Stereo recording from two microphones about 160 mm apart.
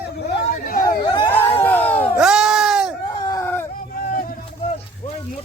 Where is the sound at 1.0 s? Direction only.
35° left (ahead or behind).